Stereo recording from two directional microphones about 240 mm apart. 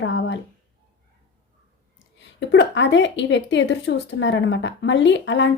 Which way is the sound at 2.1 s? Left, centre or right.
Left.